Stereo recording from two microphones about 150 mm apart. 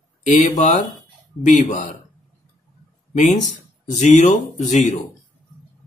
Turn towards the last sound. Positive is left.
turn(degrees=55)  # may be behind; listen again after turning